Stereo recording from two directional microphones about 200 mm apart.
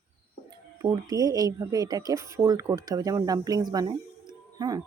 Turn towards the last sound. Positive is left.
turn(degrees=-20)  # may be behind; listen again after turning